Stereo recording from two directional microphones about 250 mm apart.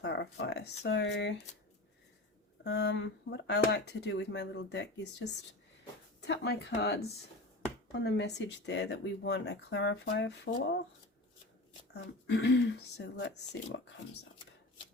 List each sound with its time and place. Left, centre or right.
0.0 s speech: left
2.6 s speech: left
11.9 s speech: left